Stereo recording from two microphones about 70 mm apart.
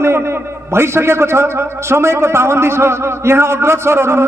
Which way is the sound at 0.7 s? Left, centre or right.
Right.